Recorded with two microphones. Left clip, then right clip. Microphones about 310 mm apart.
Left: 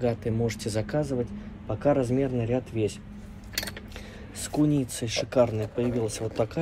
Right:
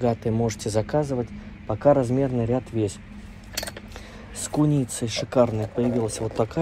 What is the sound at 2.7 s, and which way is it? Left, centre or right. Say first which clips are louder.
Speech: right 1 dB; right.